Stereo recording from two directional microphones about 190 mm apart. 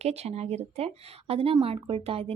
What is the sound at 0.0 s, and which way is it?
A woman's voice, 35° right (ahead or behind).